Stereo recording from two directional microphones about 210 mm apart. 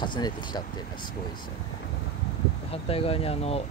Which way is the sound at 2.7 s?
25° left (ahead or behind).